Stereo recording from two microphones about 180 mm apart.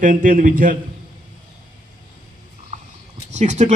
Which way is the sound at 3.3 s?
40° right (ahead or behind).